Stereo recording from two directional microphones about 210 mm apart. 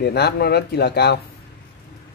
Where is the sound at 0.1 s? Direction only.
50° left (ahead or behind).